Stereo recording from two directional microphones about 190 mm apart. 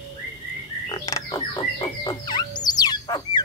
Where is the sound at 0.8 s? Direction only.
20° left (ahead or behind).